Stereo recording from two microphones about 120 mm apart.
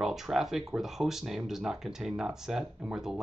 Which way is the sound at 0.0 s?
5° right (ahead or behind).